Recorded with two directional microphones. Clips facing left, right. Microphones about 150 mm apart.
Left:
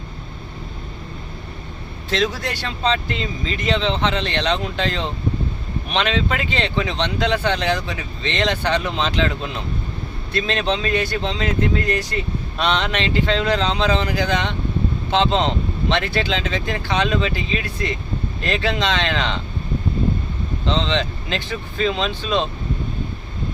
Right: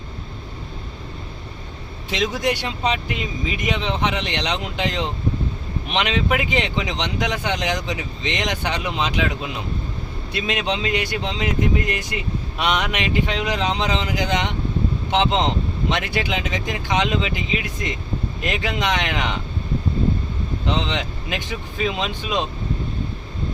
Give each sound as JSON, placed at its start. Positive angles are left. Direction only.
{"t": 2.0, "sound": "speech", "side_deg": -15}
{"t": 20.7, "sound": "speech", "side_deg": -15}